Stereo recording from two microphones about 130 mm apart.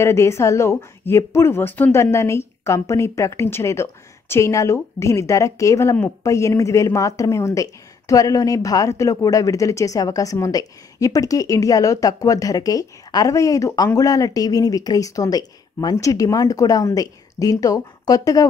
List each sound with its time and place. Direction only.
0.0 s a woman's voice: 20° left (ahead or behind)